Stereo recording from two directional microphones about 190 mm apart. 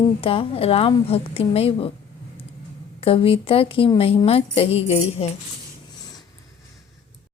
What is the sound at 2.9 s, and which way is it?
A woman's voice, 30° left (ahead or behind).